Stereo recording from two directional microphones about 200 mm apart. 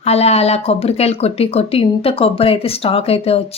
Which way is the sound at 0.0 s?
30° left (ahead or behind).